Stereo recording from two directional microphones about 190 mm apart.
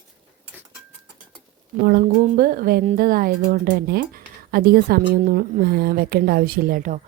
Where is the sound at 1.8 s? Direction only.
55° right (ahead or behind).